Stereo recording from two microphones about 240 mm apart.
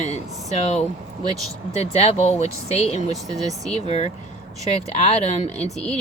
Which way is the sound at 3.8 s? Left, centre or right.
Left.